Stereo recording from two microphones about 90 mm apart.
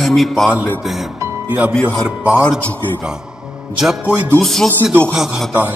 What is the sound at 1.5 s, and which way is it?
Speech, 15° right (ahead or behind).